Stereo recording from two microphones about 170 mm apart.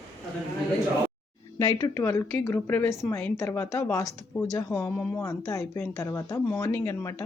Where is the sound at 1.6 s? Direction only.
20° left (ahead or behind).